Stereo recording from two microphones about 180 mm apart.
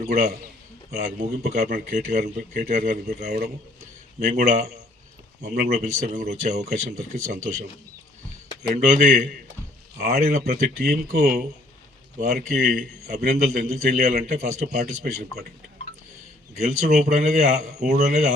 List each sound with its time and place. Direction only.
0.1 s speech: 40° right (ahead or behind)
1.6 s speech: 50° right (ahead or behind)
5.7 s speech: 40° right (ahead or behind)
8.7 s speech: 45° right (ahead or behind)
10.0 s speech: 60° right (ahead or behind)
11.2 s speech: 40° right (ahead or behind)
15.1 s speech: 50° right (ahead or behind)
16.6 s speech: 40° right (ahead or behind)